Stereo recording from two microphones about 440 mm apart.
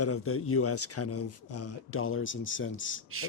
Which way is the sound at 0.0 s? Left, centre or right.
Left.